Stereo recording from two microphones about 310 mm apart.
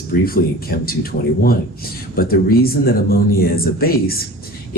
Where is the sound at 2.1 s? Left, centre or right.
Left.